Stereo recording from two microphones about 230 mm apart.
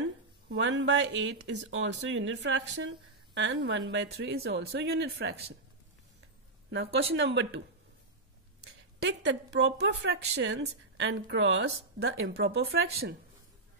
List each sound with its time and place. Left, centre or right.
0.5 s a woman's voice: right
6.7 s a woman's voice: right
9.0 s a woman's voice: right